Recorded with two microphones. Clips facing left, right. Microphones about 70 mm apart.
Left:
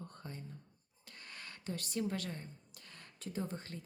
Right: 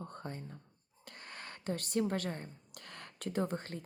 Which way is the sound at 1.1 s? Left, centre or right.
Right.